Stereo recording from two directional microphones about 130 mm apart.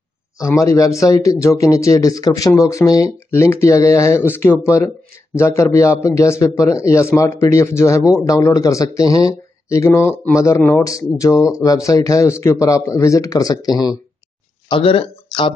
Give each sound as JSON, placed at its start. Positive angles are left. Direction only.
{"t": 0.4, "sound": "a man's voice", "side_deg": 25}
{"t": 14.7, "sound": "speech", "side_deg": 45}